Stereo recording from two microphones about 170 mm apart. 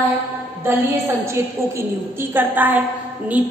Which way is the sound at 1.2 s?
15° right (ahead or behind).